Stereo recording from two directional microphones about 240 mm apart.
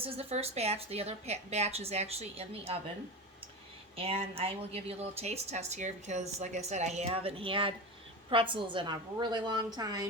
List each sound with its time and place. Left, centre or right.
0.0 s a woman's voice: right
3.9 s a woman's voice: right